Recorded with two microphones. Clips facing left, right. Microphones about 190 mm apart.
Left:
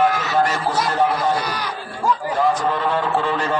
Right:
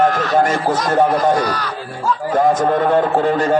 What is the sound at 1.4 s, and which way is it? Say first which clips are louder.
Speech: right 5 dB; 10° left (ahead or behind).